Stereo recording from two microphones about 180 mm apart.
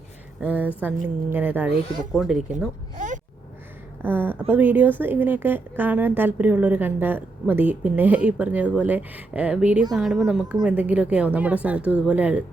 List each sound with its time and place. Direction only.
0.4 s a woman's voice: 10° right (ahead or behind)
3.0 s a sound: 45° right (ahead or behind)
4.0 s a woman's voice: 10° right (ahead or behind)